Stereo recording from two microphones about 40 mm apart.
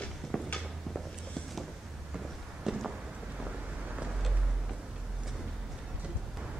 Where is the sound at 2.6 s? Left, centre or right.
Centre.